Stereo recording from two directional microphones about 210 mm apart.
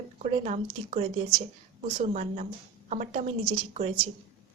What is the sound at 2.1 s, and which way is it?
Speech, 35° right (ahead or behind).